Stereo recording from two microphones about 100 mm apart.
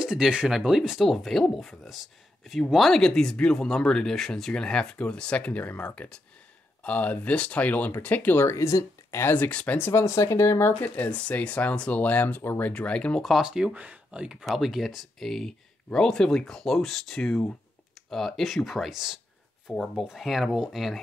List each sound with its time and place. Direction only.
0.0 s speech: 10° right (ahead or behind); by 10.7 s 30° left (ahead or behind)
10.8 s speech: 15° left (ahead or behind)
13.2 s speech: 5° right (ahead or behind)